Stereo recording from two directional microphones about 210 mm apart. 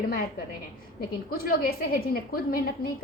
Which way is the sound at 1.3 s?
45° left (ahead or behind).